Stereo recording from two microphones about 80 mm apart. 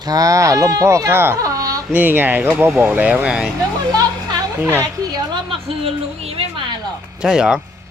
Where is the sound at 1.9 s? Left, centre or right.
Right.